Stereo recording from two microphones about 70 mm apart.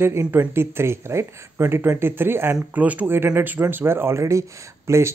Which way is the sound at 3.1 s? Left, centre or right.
Right.